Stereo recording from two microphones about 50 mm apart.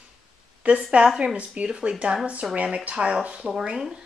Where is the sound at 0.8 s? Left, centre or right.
Centre.